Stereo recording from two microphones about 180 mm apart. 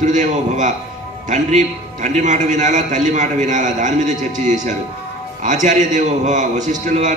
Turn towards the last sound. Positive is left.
turn(degrees=-40)  # may be behind; listen again after turning